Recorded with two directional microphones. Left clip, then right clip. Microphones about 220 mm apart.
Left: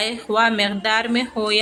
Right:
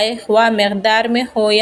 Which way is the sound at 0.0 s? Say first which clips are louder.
Right 5 dB; 15° right (ahead or behind).